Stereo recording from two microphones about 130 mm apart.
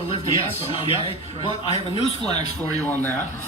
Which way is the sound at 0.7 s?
45° left (ahead or behind).